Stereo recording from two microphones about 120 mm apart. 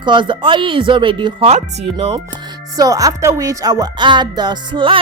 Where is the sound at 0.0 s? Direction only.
40° right (ahead or behind).